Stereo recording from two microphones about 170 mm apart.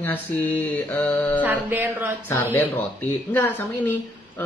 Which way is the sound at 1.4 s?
10° right (ahead or behind).